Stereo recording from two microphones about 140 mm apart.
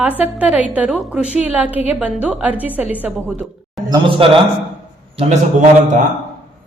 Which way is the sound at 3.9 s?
40° right (ahead or behind).